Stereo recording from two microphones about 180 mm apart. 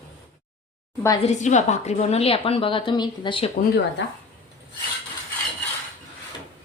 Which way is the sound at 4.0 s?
90° left.